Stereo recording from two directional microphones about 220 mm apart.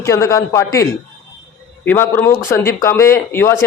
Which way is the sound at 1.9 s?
10° left (ahead or behind).